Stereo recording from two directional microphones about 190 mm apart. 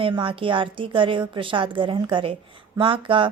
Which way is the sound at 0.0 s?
25° right (ahead or behind).